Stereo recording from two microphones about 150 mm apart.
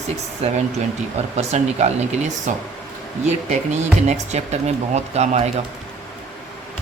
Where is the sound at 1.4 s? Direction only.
50° right (ahead or behind).